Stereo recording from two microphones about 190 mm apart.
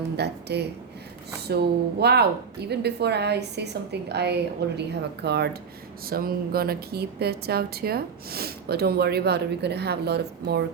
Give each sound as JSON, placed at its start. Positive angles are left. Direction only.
{"t": 0.2, "sound": "a woman's voice", "side_deg": -60}